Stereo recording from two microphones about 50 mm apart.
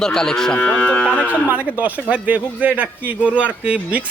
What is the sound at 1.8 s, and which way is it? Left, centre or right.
Speech, right.